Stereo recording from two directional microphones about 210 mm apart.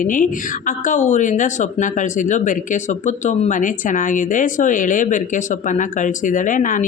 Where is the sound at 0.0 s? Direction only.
40° left (ahead or behind).